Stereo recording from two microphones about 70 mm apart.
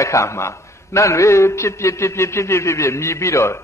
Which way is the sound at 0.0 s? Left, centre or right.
Left.